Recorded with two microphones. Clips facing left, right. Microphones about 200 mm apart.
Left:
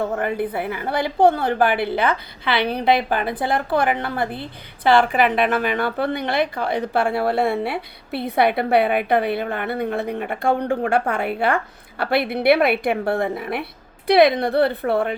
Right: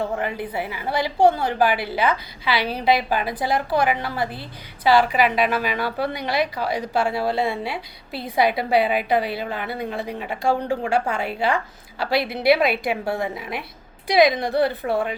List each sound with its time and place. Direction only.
0.0 s a woman's voice: 50° left (ahead or behind)